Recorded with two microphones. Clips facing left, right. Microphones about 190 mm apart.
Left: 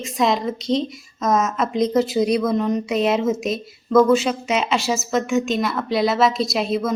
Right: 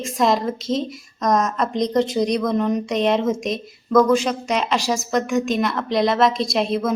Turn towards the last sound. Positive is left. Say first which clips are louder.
# even
turn(degrees=0)  # may be behind; listen again after turning